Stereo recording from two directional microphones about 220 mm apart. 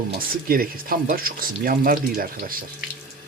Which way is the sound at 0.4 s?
40° right (ahead or behind).